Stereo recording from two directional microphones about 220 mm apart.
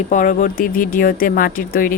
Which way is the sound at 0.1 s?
35° left (ahead or behind).